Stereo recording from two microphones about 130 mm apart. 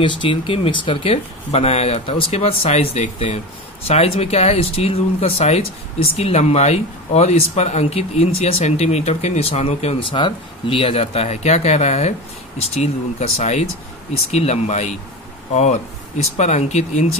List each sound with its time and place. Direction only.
0.0 s speech: 40° left (ahead or behind); by 9.9 s 55° left (ahead or behind)
10.1 s speech: 40° left (ahead or behind); by 17.1 s 60° left (ahead or behind)